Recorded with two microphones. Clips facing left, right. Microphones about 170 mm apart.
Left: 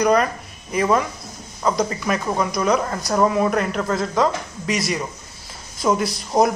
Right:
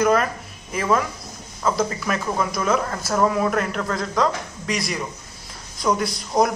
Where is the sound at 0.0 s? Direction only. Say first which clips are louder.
Left 1 dB; centre (ahead or behind).